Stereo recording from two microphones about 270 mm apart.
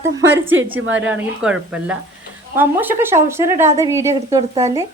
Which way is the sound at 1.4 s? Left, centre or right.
Centre.